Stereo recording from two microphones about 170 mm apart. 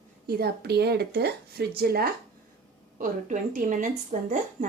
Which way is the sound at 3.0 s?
50° right (ahead or behind).